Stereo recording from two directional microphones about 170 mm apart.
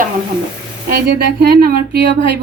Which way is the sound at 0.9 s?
70° right (ahead or behind).